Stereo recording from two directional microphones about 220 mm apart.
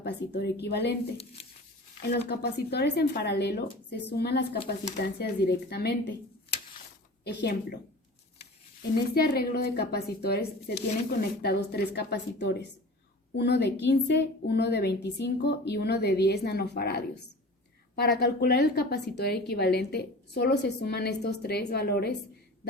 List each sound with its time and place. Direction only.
0.0 s a woman's voice: 50° left (ahead or behind)
7.3 s a woman's voice: 45° left (ahead or behind)
9.2 s a woman's voice: 45° left (ahead or behind)